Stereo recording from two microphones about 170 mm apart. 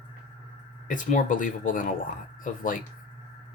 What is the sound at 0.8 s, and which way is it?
Speech, 50° left (ahead or behind).